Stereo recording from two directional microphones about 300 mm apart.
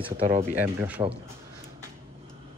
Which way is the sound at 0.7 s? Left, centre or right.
Centre.